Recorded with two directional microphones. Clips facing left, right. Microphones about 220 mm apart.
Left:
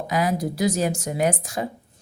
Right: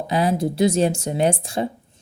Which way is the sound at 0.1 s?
30° right (ahead or behind).